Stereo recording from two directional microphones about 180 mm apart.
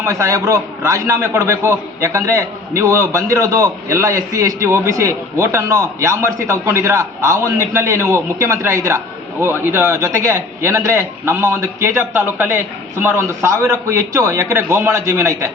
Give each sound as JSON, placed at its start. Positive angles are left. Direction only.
{"t": 0.0, "sound": "a man's voice", "side_deg": -15}